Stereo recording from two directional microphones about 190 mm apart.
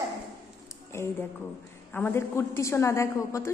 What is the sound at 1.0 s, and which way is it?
A woman's voice, 15° left (ahead or behind).